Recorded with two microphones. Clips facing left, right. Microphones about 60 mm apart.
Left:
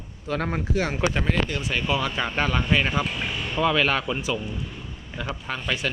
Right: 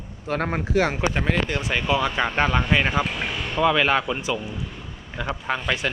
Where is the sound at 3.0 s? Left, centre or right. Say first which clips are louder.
Right 2 dB; right.